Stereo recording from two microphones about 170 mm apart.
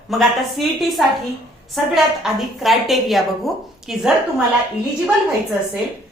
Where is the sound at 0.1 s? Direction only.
Centre (ahead or behind).